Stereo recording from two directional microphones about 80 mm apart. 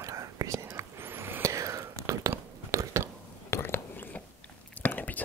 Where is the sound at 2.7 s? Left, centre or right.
Right.